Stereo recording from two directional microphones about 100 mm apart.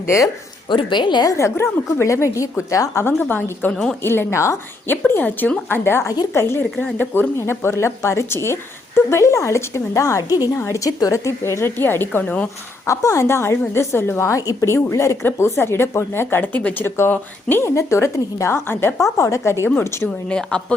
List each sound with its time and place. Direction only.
0.7 s a woman's voice: 50° left (ahead or behind)
1.3 s a woman's voice: 30° left (ahead or behind)
20.2 s a woman's voice: 10° left (ahead or behind)